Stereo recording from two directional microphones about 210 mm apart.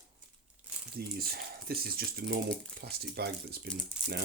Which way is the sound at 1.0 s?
45° right (ahead or behind).